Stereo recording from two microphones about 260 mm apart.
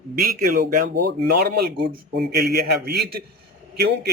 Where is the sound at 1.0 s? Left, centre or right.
Right.